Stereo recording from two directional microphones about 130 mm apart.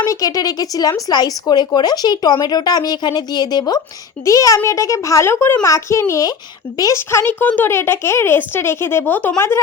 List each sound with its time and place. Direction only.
0.0 s a woman's voice: 25° left (ahead or behind)